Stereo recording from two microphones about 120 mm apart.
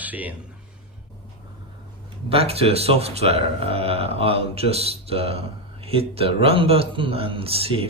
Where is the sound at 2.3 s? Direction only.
55° right (ahead or behind).